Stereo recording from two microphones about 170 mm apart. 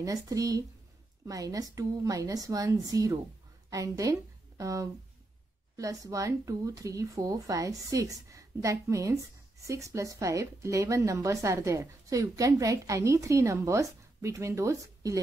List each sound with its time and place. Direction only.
0.0 s a woman's voice: 20° right (ahead or behind)